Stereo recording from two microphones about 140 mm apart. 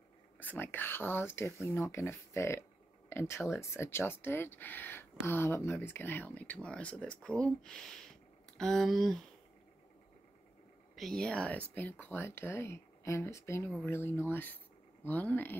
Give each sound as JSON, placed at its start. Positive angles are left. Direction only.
{"t": 0.4, "sound": "speech", "side_deg": 15}
{"t": 11.0, "sound": "speech", "side_deg": 5}